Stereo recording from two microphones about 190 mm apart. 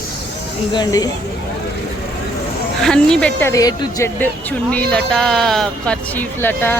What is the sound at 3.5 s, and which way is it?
Speech, 20° left (ahead or behind).